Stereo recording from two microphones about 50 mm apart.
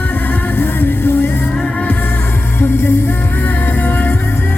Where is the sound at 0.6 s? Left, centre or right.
Left.